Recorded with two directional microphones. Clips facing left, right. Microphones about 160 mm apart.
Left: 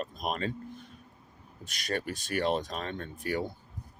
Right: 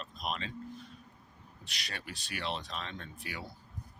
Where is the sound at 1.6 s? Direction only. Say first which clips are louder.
Left 12 dB; 45° left (ahead or behind).